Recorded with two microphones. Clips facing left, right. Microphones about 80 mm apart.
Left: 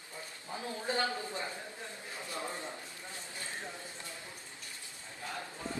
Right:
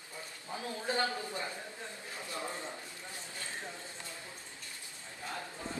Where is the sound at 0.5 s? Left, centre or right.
Left.